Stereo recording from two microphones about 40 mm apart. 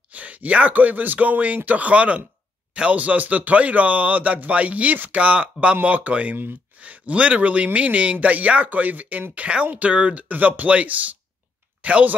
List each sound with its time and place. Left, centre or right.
0.1 s a man's voice: right
3.0 s a man's voice: right
5.2 s a man's voice: right
5.8 s a man's voice: right
9.3 s a man's voice: right
10.2 s speech: right